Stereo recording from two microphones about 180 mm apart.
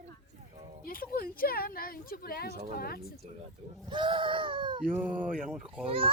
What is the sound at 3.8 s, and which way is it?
Speech, 25° right (ahead or behind).